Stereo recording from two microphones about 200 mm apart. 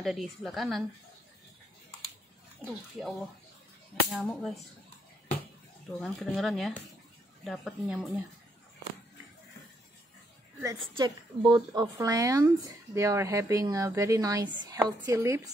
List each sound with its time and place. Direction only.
0.0 s speech: centre (ahead or behind)
2.6 s speech: centre (ahead or behind)
5.9 s speech: centre (ahead or behind)
10.6 s a woman's voice: 20° right (ahead or behind)